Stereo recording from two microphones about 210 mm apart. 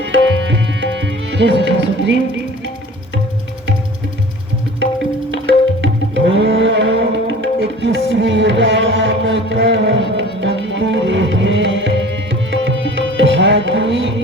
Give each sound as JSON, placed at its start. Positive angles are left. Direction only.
{"t": 0.0, "sound": "tabla", "side_deg": -60}
{"t": 5.8, "sound": "tabla", "side_deg": -60}